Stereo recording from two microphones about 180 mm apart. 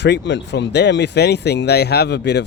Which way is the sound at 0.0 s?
75° left (ahead or behind).